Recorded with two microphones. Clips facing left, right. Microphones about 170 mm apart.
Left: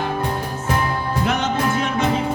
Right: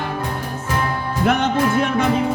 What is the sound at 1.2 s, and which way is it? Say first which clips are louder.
Music: right 5 dB; 55° right (ahead or behind).